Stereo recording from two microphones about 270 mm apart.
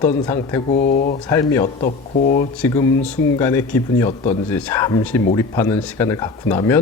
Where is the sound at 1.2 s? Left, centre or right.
Centre.